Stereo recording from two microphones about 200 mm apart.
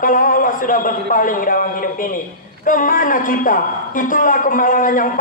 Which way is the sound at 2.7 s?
45° left (ahead or behind).